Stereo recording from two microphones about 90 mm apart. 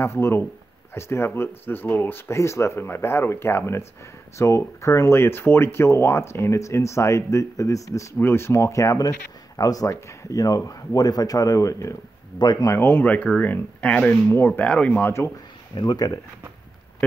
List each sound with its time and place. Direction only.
0.0 s speech: 30° left (ahead or behind); by 12.7 s 45° left (ahead or behind)
12.7 s speech: 25° left (ahead or behind)
15.7 s speech: 50° left (ahead or behind)